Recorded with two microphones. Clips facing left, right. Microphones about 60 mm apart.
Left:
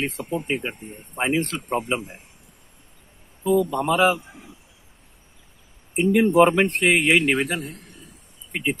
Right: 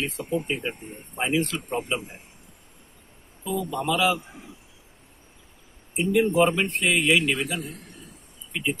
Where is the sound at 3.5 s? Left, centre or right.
Left.